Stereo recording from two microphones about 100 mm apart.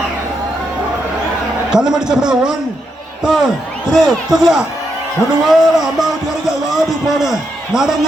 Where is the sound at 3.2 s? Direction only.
5° right (ahead or behind).